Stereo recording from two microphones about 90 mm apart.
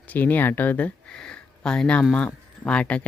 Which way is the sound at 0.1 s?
20° left (ahead or behind).